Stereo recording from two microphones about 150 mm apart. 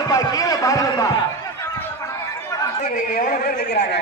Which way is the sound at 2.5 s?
20° left (ahead or behind).